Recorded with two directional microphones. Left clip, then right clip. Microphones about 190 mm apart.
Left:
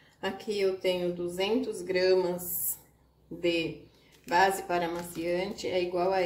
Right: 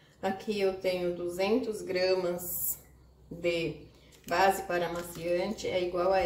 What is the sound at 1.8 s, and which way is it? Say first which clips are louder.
Speech: left 4 dB; 35° left (ahead or behind).